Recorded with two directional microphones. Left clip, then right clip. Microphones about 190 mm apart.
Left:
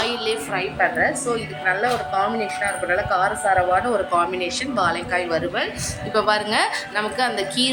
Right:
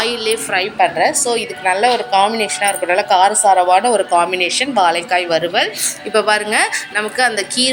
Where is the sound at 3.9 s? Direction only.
10° right (ahead or behind).